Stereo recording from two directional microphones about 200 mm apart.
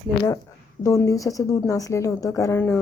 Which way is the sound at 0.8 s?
15° left (ahead or behind).